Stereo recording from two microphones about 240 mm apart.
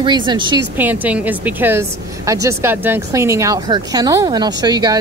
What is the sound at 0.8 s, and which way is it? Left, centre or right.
A woman's voice, centre.